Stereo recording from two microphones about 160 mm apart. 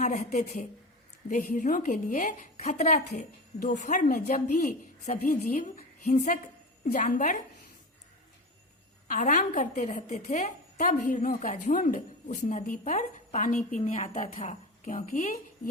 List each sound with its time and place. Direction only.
0.0 s a woman's voice: 50° left (ahead or behind)
9.0 s a woman's voice: 55° left (ahead or behind)